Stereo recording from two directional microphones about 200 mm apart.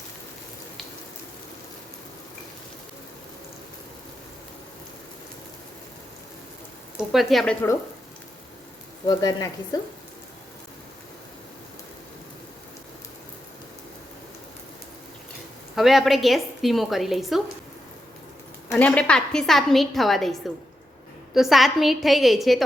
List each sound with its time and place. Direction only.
6.9 s speech: centre (ahead or behind)
9.0 s speech: 20° left (ahead or behind)
15.7 s a woman's voice: centre (ahead or behind)
18.7 s a woman's voice: 5° left (ahead or behind)
21.3 s a woman's voice: centre (ahead or behind)